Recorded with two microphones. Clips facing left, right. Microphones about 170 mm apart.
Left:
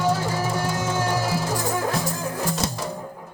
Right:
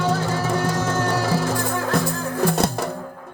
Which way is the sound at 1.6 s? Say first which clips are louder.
Right 2 dB; 60° right (ahead or behind).